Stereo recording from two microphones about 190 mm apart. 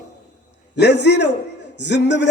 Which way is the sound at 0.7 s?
65° left (ahead or behind).